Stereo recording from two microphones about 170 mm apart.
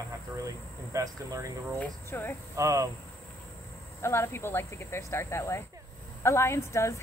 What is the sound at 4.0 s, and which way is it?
Speech, 15° left (ahead or behind).